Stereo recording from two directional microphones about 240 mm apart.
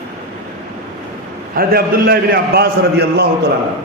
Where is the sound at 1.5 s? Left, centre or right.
Right.